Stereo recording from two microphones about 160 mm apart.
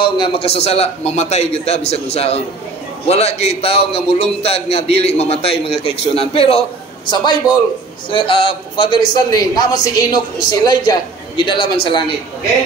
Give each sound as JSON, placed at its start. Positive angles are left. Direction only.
{"t": 0.0, "sound": "a man's voice", "side_deg": 30}